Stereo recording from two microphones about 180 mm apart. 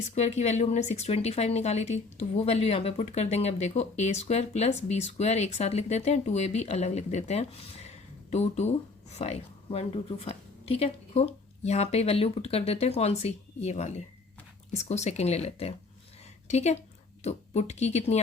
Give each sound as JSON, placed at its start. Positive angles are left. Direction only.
{"t": 0.1, "sound": "speech", "side_deg": 40}
{"t": 16.2, "sound": "a sound", "side_deg": 40}
{"t": 17.2, "sound": "speech", "side_deg": 35}